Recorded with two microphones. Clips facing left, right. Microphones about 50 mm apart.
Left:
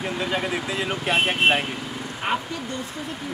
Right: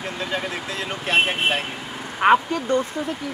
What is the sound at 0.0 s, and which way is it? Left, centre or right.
Speech, centre.